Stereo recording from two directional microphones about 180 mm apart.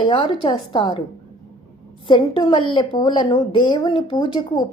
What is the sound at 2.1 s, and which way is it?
A woman's voice, 25° left (ahead or behind).